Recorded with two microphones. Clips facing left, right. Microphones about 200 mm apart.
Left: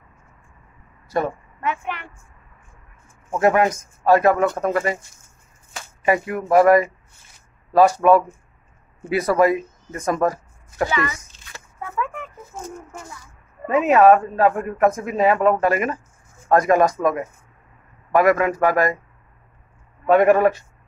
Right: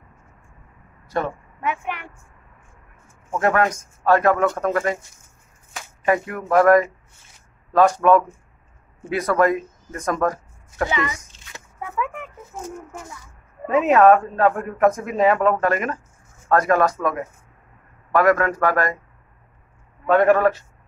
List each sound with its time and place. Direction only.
1.6 s a woman's voice: 15° right (ahead or behind)
3.3 s speech: 10° left (ahead or behind)
6.0 s speech: 10° left (ahead or behind)
10.9 s a sound: 20° right (ahead or behind)
13.7 s speech: centre (ahead or behind)
20.1 s speech: 15° left (ahead or behind)